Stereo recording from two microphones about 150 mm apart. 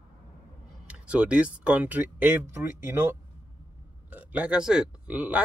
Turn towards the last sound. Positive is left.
turn(degrees=-10)  # may be behind; listen again after turning